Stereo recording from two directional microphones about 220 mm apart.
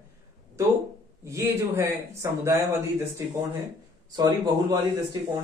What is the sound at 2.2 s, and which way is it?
Speech, 10° right (ahead or behind).